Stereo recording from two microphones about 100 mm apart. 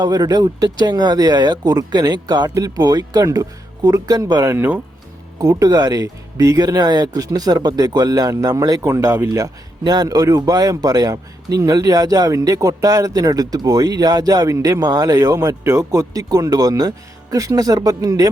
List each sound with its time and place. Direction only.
0.0 s speech: 40° right (ahead or behind)
4.5 s speech: 20° right (ahead or behind)
5.4 s speech: 35° right (ahead or behind)
9.3 s speech: 40° right (ahead or behind)